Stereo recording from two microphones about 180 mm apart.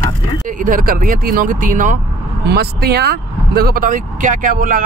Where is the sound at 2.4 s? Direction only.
60° right (ahead or behind).